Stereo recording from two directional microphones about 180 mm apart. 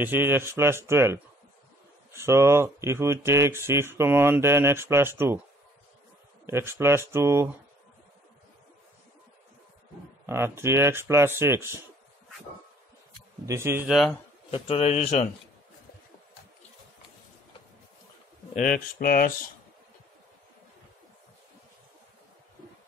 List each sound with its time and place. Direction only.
0.0 s speech: 10° right (ahead or behind)
6.4 s speech: 15° right (ahead or behind)
10.2 s speech: 15° right (ahead or behind)
13.1 s speech: 15° right (ahead or behind)
14.5 s a man's voice: 35° left (ahead or behind)
18.5 s speech: 50° left (ahead or behind)